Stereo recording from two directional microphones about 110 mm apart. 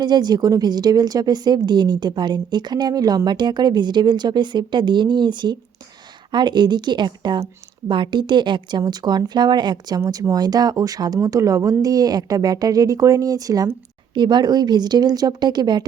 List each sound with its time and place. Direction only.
0.0 s a woman's voice: 40° right (ahead or behind)
10.0 s a woman's voice: 30° right (ahead or behind)